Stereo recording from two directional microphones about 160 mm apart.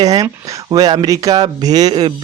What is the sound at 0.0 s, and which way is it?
Speech, 25° right (ahead or behind).